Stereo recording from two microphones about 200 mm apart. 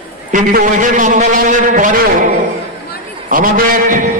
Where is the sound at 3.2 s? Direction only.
45° right (ahead or behind).